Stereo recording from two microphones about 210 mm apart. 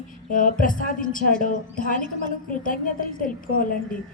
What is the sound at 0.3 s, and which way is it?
A woman's voice, 40° left (ahead or behind).